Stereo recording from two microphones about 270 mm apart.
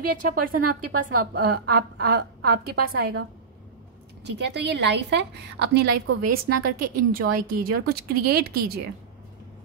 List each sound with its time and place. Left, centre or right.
0.0 s a woman's voice: right
0.6 s a woman's voice: right
1.2 s a woman's voice: right
4.2 s a woman's voice: right
5.9 s a woman's voice: right
6.3 s a woman's voice: right